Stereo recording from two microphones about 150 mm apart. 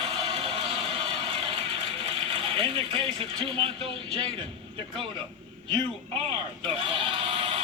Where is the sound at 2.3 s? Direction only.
35° right (ahead or behind).